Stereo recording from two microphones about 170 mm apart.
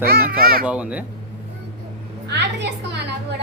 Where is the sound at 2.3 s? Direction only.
90° right.